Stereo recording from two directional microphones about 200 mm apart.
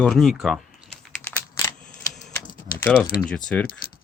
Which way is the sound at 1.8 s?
Centre (ahead or behind).